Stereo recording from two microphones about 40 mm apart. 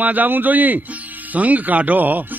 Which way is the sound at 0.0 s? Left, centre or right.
Right.